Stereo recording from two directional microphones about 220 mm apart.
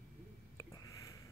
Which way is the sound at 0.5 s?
15° left (ahead or behind).